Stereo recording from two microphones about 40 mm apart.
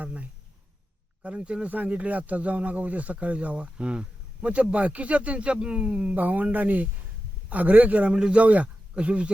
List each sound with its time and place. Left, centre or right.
0.0 s speech: right